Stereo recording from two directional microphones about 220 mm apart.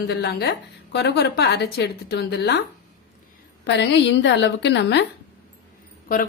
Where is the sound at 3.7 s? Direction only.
55° left (ahead or behind).